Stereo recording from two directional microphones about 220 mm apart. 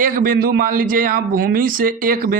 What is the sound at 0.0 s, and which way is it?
A man's voice, 40° right (ahead or behind).